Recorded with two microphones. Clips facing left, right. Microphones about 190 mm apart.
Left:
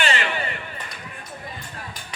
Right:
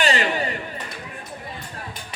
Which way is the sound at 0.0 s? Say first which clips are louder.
Right 3 dB; 35° right (ahead or behind).